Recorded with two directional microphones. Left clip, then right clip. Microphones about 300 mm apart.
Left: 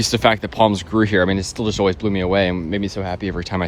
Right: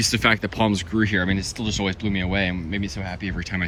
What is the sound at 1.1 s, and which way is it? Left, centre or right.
Speech, left.